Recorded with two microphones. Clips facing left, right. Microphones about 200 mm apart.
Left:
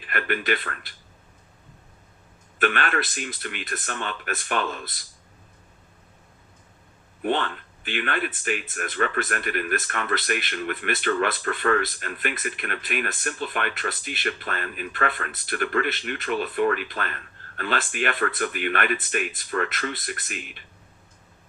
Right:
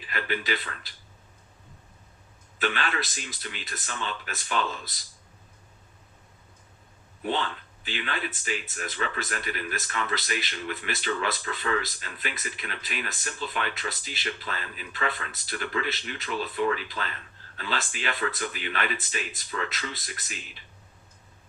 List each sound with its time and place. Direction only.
0.1 s speech: 55° left (ahead or behind)
2.6 s speech: 55° left (ahead or behind)
7.2 s speech: 55° left (ahead or behind)